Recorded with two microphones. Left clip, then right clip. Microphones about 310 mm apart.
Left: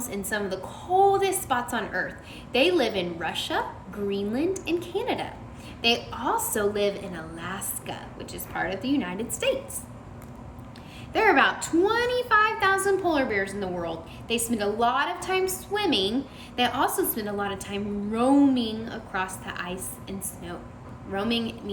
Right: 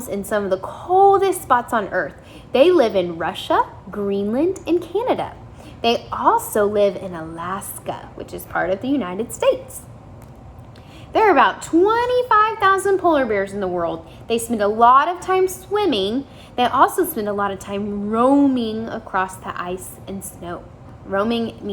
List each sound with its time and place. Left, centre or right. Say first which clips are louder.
0.0 s a woman's voice: right 8 dB; right
11.1 s a child's voice: right 6 dB; centre